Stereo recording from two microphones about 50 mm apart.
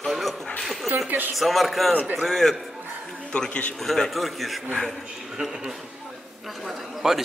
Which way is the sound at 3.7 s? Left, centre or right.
Centre.